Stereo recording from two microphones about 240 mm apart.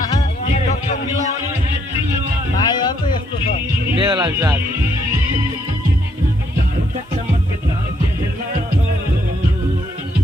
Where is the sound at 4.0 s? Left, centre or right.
Centre.